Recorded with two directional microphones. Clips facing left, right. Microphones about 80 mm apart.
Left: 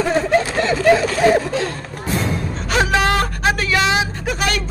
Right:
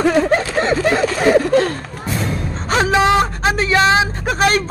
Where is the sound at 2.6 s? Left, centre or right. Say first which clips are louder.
Right 3 dB; right.